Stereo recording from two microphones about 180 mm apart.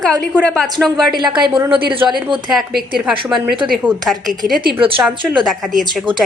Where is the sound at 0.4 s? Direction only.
5° left (ahead or behind).